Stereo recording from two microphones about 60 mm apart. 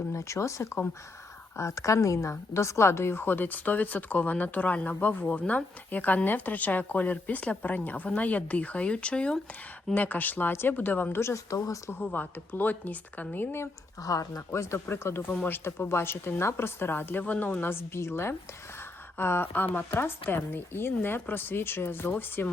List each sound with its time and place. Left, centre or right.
0.1 s speech: left; by 9.4 s centre
9.9 s speech: left
11.5 s speech: left
11.9 s speech: left
14.0 s speech: left
14.5 s a woman's voice: left